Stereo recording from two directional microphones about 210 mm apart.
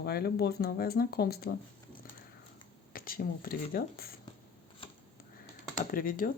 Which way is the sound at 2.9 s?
45° left (ahead or behind).